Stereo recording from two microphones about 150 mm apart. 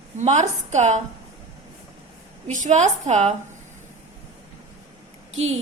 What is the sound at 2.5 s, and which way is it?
Speech, 55° right (ahead or behind).